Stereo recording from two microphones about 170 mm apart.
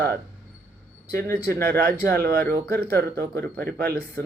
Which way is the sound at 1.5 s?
65° right (ahead or behind).